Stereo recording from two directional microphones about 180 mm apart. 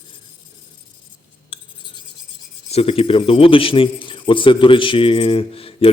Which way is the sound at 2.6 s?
35° left (ahead or behind).